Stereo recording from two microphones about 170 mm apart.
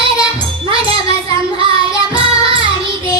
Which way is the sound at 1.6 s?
30° right (ahead or behind).